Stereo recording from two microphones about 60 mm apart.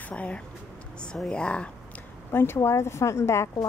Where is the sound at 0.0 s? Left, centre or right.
Left.